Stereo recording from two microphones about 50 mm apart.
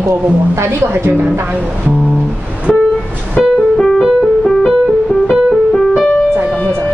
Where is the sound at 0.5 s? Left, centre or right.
Right.